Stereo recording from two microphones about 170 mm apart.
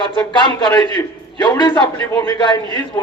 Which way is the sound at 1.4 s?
25° left (ahead or behind).